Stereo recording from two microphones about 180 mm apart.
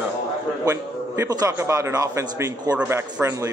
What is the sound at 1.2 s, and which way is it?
A man's voice, 20° right (ahead or behind).